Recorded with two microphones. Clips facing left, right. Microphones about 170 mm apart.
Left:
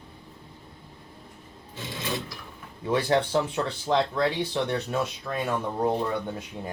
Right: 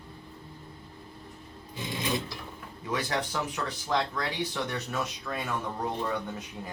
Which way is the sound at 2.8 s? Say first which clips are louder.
Left 8 dB; 30° left (ahead or behind).